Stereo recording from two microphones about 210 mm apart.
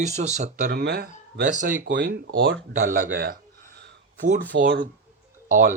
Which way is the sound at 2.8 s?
40° right (ahead or behind).